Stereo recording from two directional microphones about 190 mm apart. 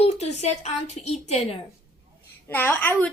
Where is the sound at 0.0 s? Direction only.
35° left (ahead or behind).